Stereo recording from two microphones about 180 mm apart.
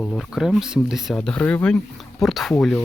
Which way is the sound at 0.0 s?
Centre (ahead or behind).